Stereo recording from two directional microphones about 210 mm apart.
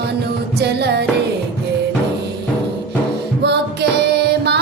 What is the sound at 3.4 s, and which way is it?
Music, 50° right (ahead or behind).